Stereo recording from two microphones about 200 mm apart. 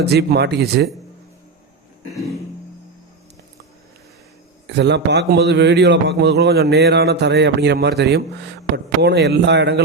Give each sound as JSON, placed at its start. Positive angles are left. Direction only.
{"t": 0.0, "sound": "a man's voice", "side_deg": -55}
{"t": 4.6, "sound": "a man's voice", "side_deg": -60}